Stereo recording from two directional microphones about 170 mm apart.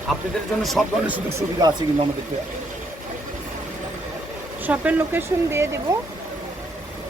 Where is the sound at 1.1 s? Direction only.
15° right (ahead or behind).